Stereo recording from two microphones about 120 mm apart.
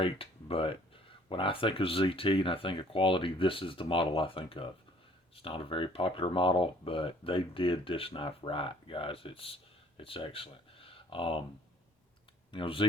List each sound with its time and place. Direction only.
0.0 s speech: 50° left (ahead or behind)
12.5 s speech: 45° left (ahead or behind)